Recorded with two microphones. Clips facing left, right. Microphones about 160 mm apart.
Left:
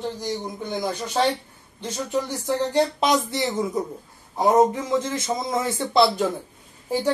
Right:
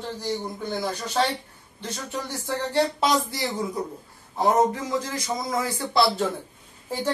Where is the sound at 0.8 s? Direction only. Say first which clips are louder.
Left 3 dB; 15° left (ahead or behind).